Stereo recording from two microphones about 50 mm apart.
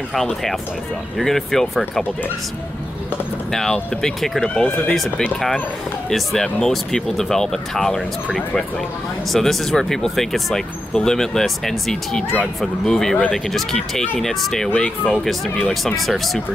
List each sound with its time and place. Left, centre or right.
0.1 s speech: centre
4.0 s speech: centre
6.0 s speech: centre
14.7 s speech: left
15.2 s speech: centre